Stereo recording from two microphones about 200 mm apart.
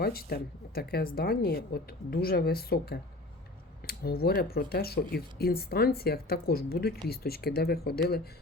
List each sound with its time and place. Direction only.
0.0 s speech: 50° left (ahead or behind)